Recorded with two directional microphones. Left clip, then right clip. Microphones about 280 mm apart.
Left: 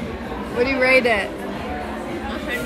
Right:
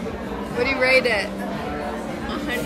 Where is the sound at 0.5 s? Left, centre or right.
Centre.